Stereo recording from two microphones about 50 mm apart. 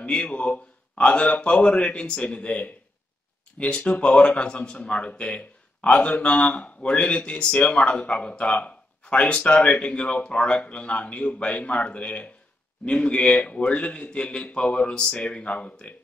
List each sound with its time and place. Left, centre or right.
0.0 s speech: left